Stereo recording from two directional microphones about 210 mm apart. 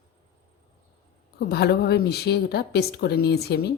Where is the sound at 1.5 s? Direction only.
50° left (ahead or behind).